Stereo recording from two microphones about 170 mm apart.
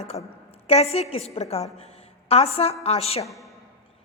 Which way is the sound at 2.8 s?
35° left (ahead or behind).